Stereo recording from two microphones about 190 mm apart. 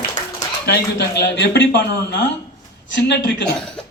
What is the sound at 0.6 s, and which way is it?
A man's voice, 60° left (ahead or behind).